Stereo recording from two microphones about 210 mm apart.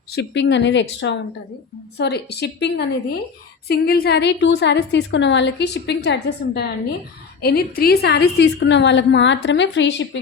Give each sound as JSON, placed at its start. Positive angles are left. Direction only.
{"t": 0.1, "sound": "a woman's voice", "side_deg": 55}